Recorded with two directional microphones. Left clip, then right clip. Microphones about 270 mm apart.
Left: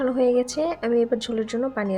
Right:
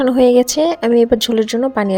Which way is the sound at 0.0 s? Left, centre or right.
Right.